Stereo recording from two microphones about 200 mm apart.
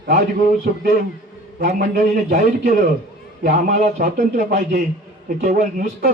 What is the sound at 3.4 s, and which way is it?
A man's voice, 40° right (ahead or behind).